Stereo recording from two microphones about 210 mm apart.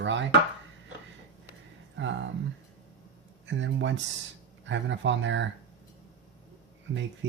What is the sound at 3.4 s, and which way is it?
Speech, 60° right (ahead or behind).